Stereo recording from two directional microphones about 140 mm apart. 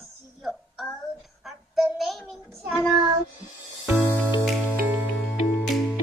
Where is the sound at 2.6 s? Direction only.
Centre (ahead or behind).